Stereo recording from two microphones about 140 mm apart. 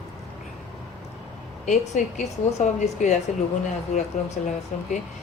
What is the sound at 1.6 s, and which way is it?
Speech, 65° left (ahead or behind).